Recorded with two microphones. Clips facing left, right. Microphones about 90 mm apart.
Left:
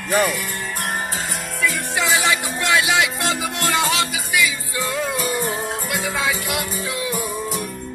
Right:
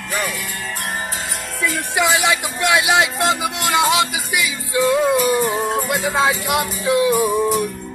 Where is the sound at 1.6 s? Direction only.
15° right (ahead or behind).